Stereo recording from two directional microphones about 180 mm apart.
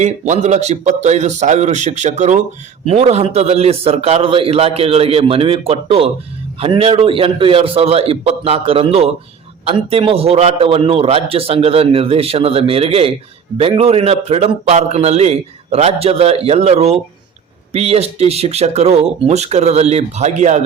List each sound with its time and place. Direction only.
0.0 s a man's voice: 40° right (ahead or behind)